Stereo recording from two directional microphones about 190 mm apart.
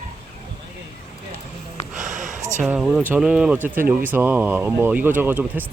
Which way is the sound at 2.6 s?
5° right (ahead or behind).